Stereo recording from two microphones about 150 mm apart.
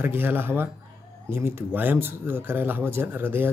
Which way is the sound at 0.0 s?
15° right (ahead or behind).